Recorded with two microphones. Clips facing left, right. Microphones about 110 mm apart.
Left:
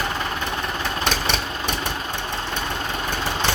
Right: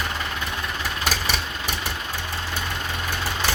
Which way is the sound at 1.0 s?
5° right (ahead or behind).